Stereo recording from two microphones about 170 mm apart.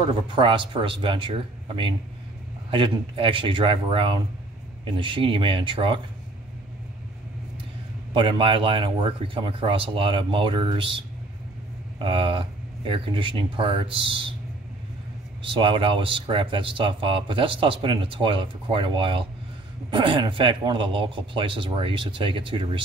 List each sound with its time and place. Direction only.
0.1 s speech: 30° right (ahead or behind)
8.1 s speech: 30° right (ahead or behind)
12.0 s speech: 30° right (ahead or behind)
15.4 s speech: 30° right (ahead or behind)